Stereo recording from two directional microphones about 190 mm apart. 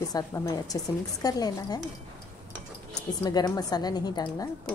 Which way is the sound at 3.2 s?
20° left (ahead or behind).